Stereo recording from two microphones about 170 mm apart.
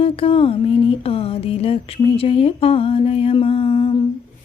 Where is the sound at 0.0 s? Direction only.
35° left (ahead or behind).